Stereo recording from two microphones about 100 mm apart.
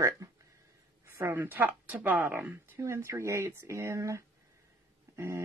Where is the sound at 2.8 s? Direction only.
30° right (ahead or behind).